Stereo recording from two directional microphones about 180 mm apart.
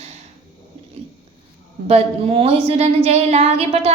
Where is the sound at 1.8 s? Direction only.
35° right (ahead or behind).